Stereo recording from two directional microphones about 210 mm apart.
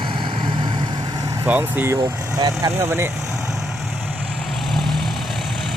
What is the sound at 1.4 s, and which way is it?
Speech, 10° right (ahead or behind).